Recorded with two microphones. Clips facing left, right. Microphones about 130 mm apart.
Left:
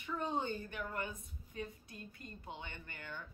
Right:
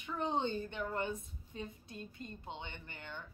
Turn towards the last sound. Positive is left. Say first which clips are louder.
# even
turn(degrees=-25)  # may be behind; listen again after turning